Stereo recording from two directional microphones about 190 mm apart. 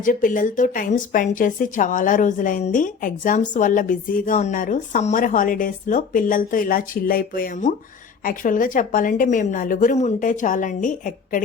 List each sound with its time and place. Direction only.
0.0 s speech: 45° left (ahead or behind)